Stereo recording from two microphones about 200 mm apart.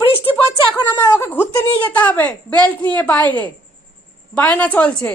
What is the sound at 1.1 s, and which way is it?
A woman's voice, 10° left (ahead or behind).